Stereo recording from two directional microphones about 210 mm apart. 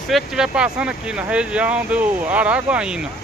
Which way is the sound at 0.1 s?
5° right (ahead or behind).